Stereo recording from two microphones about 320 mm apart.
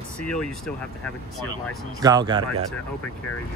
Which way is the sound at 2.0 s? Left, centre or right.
Centre.